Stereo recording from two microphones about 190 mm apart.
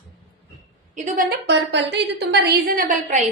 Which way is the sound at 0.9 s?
45° right (ahead or behind).